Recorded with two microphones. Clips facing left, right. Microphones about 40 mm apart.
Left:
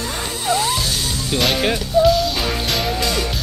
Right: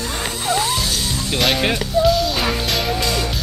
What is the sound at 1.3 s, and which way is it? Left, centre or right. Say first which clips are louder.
Speech: even; centre.